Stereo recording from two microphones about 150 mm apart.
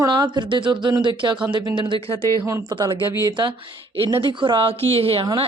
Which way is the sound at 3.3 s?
30° right (ahead or behind).